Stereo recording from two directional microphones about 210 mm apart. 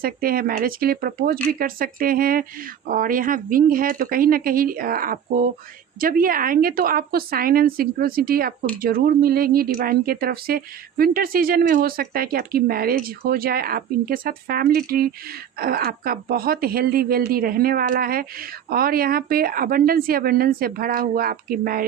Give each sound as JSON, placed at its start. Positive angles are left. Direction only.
{"t": 0.0, "sound": "speech", "side_deg": -45}